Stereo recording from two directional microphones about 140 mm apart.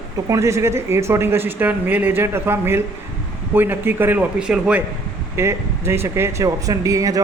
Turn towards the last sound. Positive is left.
turn(degrees=-25)  # may be behind; listen again after turning